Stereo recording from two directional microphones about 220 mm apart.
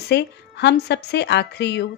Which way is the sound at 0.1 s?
50° left (ahead or behind).